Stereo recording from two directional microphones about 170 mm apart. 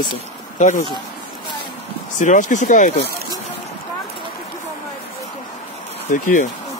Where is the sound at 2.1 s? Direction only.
45° left (ahead or behind).